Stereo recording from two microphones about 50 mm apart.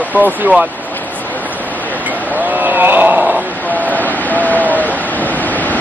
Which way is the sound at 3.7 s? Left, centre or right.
Left.